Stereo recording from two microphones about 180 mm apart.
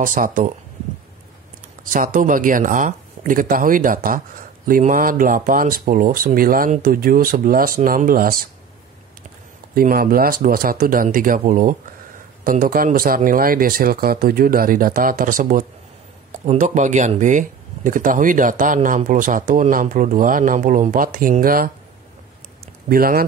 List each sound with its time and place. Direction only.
0.0 s speech: 50° right (ahead or behind)
1.9 s speech: 50° right (ahead or behind)
9.8 s speech: 55° right (ahead or behind)
22.8 s speech: 55° right (ahead or behind)